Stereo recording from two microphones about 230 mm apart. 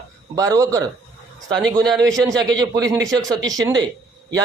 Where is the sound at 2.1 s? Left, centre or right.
Centre.